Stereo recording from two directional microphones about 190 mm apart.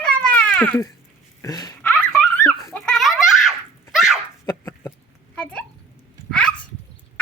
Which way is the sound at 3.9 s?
Centre (ahead or behind).